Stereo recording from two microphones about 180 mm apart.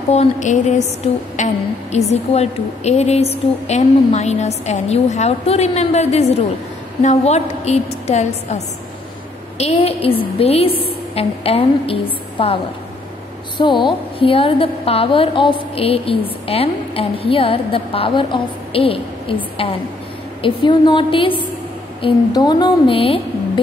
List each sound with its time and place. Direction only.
0.1 s a woman's voice: 40° left (ahead or behind)
13.6 s a woman's voice: 25° left (ahead or behind)